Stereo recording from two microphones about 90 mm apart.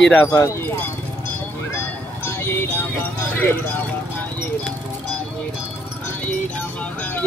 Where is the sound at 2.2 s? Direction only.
25° left (ahead or behind).